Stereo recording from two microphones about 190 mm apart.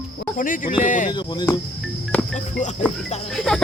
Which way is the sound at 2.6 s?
40° left (ahead or behind).